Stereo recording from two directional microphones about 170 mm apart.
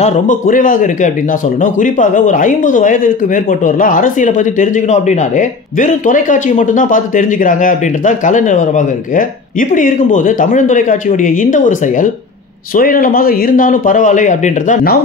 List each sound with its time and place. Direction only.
0.0 s speech: 50° left (ahead or behind)